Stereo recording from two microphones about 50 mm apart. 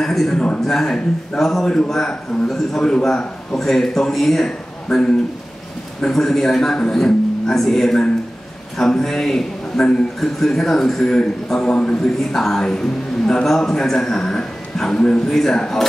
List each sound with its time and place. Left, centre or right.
0.0 s a man's voice: centre
12.4 s a man's voice: centre